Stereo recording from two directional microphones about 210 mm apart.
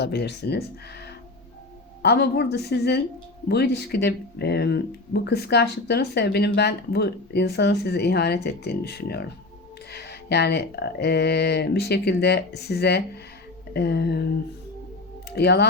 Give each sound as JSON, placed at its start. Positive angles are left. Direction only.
{"t": 0.0, "sound": "speech", "side_deg": 50}
{"t": 15.4, "sound": "speech", "side_deg": 50}